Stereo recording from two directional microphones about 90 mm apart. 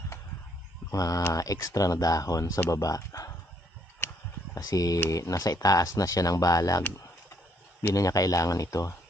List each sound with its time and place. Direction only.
0.8 s speech: 40° left (ahead or behind)
4.6 s speech: 40° left (ahead or behind)
7.9 s speech: 40° left (ahead or behind)